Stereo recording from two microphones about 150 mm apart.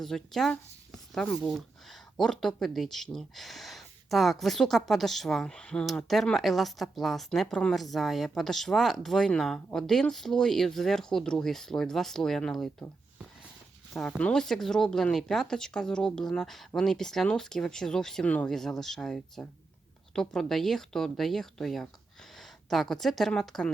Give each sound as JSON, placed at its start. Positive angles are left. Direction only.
{"t": 0.0, "sound": "speech", "side_deg": 0}
{"t": 13.9, "sound": "speech", "side_deg": 0}